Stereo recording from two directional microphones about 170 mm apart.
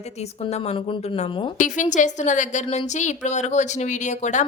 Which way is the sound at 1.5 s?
50° left (ahead or behind).